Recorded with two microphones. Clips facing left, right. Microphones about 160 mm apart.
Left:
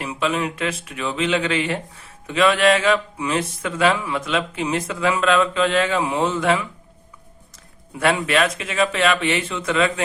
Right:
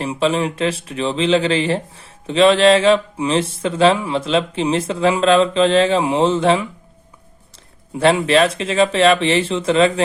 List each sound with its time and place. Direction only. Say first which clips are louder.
0.0 s speech: right 5 dB; 30° right (ahead or behind)
7.9 s speech: right 5 dB; 30° right (ahead or behind)